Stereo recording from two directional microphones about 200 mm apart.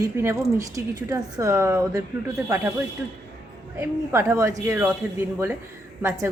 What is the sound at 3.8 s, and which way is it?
Speech, 10° right (ahead or behind).